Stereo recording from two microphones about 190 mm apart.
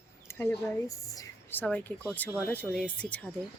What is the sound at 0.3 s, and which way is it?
Speech, 15° left (ahead or behind).